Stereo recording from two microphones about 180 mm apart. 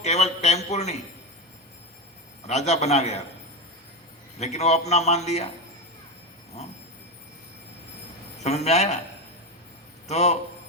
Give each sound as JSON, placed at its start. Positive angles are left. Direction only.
{"t": 0.0, "sound": "a man's voice", "side_deg": 40}
{"t": 2.5, "sound": "a man's voice", "side_deg": 40}
{"t": 4.4, "sound": "a man's voice", "side_deg": 40}
{"t": 8.4, "sound": "a man's voice", "side_deg": 35}
{"t": 10.1, "sound": "a man's voice", "side_deg": 40}